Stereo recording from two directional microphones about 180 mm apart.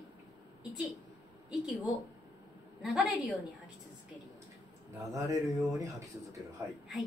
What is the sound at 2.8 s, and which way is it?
Speech, centre (ahead or behind).